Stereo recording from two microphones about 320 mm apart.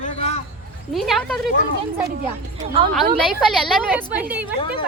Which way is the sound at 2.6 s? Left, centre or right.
Centre.